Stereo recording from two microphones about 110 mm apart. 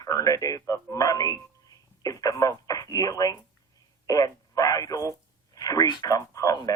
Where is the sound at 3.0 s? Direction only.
35° left (ahead or behind).